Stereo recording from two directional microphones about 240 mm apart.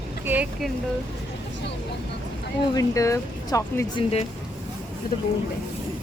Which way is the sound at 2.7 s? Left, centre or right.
Centre.